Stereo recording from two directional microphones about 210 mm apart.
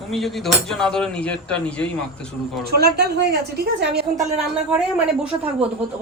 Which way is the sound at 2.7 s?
50° right (ahead or behind).